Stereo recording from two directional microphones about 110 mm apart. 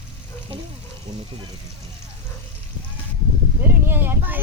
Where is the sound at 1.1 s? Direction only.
75° right (ahead or behind).